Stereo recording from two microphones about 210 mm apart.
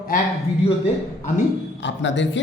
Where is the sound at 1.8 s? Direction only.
60° left (ahead or behind).